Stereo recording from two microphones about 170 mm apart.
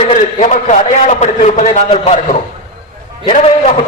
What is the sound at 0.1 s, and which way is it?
A man's voice, 45° left (ahead or behind).